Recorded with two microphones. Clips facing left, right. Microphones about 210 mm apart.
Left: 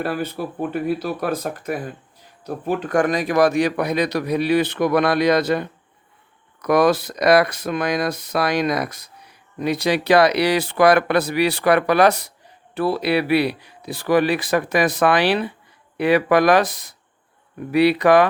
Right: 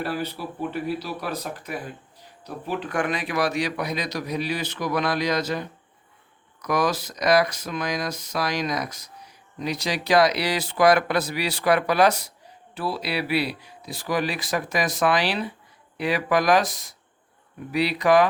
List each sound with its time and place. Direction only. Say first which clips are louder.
0.0 s speech: left 4 dB; 50° left (ahead or behind)